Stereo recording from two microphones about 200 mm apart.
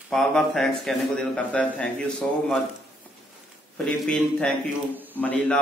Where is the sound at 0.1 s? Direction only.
Centre (ahead or behind).